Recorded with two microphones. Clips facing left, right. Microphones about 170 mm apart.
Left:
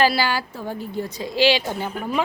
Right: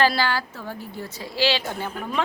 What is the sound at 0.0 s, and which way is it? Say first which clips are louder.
A woman's voice: left 2 dB; 10° left (ahead or behind).